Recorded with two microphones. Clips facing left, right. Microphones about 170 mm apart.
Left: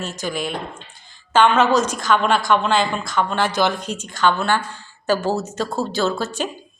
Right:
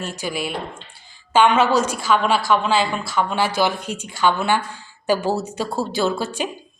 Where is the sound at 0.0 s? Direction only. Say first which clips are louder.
Left 1 dB; 10° right (ahead or behind).